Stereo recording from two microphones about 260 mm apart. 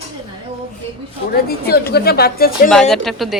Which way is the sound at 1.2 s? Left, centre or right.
Left.